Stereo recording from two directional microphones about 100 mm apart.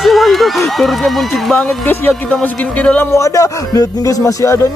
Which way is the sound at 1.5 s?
15° left (ahead or behind).